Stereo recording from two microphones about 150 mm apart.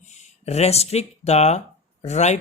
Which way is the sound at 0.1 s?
45° left (ahead or behind).